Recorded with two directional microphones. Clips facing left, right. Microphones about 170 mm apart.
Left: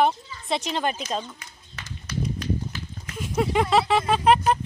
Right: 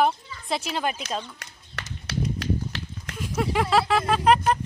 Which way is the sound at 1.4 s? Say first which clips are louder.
Right 3 dB; 75° right (ahead or behind).